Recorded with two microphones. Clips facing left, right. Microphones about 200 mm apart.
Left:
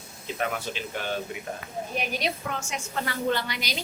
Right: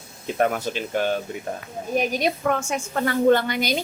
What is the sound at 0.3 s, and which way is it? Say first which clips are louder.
Speech: right 8 dB; 45° right (ahead or behind).